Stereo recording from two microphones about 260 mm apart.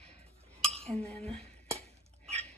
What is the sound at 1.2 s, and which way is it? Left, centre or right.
Speech, right.